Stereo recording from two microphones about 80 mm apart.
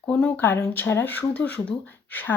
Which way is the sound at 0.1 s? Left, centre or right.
Left.